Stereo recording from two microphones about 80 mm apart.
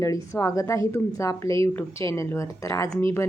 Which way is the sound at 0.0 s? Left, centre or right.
Left.